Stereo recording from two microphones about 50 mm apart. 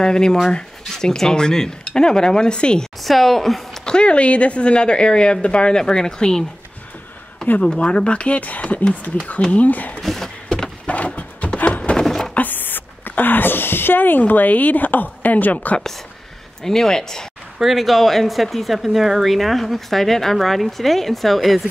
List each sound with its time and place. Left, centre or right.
0.0 s speech: centre
3.0 s speech: centre
3.8 s a woman's voice: centre
7.6 s a woman's voice: left
9.9 s a sound: centre
10.9 s a sound: left
12.0 s a sound: centre
12.4 s speech: left
16.6 s speech: centre
17.6 s speech: centre